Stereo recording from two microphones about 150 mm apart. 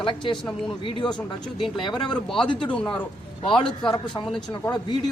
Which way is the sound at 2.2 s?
5° left (ahead or behind).